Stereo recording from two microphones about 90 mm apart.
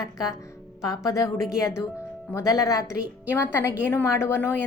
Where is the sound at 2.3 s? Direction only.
35° left (ahead or behind).